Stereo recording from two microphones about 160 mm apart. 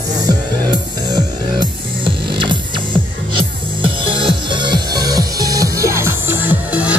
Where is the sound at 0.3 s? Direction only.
25° right (ahead or behind).